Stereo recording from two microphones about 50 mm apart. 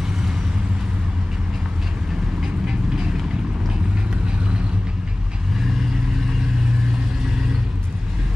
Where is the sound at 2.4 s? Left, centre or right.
Centre.